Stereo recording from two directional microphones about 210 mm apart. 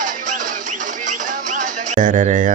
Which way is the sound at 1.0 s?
40° right (ahead or behind).